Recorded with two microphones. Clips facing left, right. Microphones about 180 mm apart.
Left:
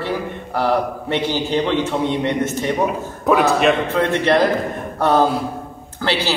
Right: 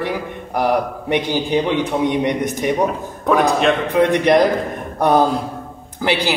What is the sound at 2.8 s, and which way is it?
Speech, 5° left (ahead or behind).